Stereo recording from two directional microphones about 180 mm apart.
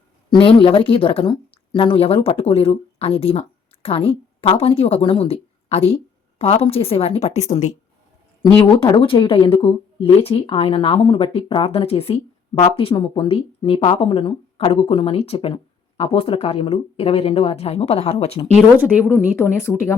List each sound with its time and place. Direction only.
0.3 s a woman's voice: 30° left (ahead or behind)
8.4 s speech: 25° left (ahead or behind)
18.5 s speech: 5° right (ahead or behind)
19.4 s speech: 15° left (ahead or behind)